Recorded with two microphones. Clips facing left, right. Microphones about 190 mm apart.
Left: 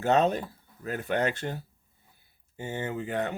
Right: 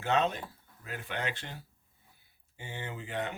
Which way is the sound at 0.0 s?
40° left (ahead or behind).